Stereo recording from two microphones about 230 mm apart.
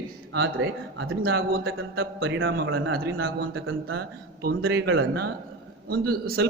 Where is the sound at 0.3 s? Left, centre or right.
Right.